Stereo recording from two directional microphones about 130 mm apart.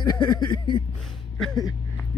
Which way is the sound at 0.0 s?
35° left (ahead or behind).